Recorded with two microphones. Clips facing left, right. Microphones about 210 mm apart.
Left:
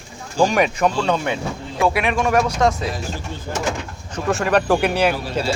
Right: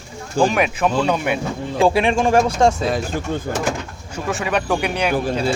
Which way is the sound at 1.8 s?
30° right (ahead or behind).